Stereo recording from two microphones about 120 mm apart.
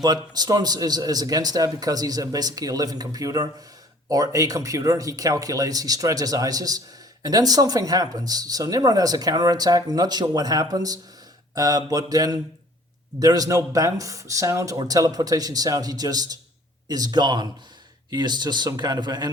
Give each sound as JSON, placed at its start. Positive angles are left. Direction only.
{"t": 0.0, "sound": "speech", "side_deg": -35}